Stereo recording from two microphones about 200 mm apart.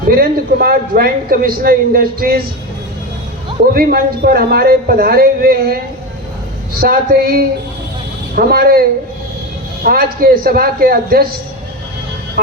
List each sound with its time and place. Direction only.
0.2 s a man's voice: 50° right (ahead or behind)
3.8 s a man's voice: 50° right (ahead or behind)
6.7 s a man's voice: 50° right (ahead or behind)
9.8 s a man's voice: 45° right (ahead or behind)